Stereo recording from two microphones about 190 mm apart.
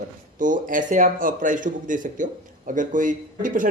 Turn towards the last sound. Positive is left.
turn(degrees=-45)  # may be behind; listen again after turning